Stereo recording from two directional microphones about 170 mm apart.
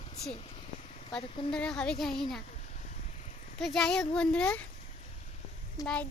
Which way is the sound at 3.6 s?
5° left (ahead or behind).